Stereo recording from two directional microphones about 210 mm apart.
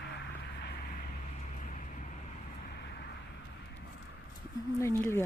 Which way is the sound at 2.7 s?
50° left (ahead or behind).